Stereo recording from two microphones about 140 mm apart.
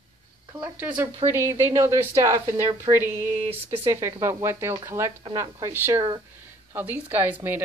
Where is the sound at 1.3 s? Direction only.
20° right (ahead or behind).